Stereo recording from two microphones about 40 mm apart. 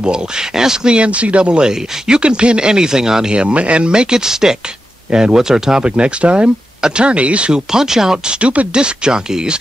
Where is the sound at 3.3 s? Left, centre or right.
Right.